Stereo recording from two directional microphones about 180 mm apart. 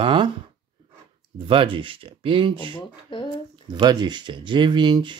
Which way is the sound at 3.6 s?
25° right (ahead or behind).